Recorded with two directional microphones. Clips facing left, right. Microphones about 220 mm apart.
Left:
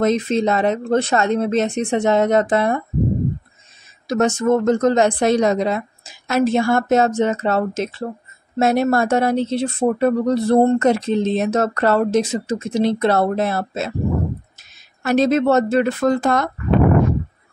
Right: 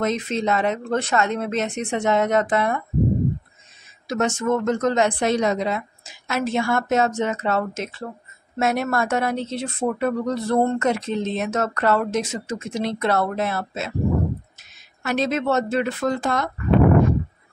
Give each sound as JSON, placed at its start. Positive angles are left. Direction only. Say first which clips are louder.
{"t": 0.0, "sound": "speech", "louder": "left 6 dB", "side_deg": 35}
{"t": 4.1, "sound": "speech", "louder": "left 5 dB", "side_deg": 40}
{"t": 15.0, "sound": "speech", "louder": "left 7 dB", "side_deg": 40}